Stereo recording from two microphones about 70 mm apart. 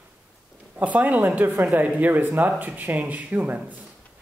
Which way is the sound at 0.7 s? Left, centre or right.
Right.